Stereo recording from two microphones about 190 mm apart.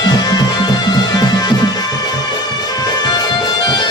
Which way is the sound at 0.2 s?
20° left (ahead or behind).